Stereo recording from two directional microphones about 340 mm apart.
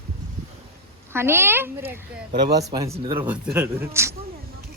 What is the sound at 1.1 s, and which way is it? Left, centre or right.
Speech, centre.